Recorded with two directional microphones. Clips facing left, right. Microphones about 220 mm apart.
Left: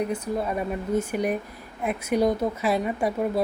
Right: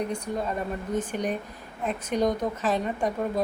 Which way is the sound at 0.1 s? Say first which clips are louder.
Left 3 dB; 5° left (ahead or behind).